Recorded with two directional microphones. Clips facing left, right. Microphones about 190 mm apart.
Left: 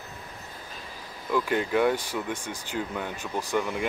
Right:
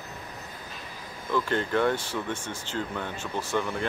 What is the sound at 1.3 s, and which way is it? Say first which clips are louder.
Speech: left 1 dB; 10° left (ahead or behind).